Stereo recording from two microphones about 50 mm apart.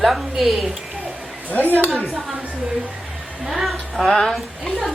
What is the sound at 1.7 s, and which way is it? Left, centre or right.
Speech, right.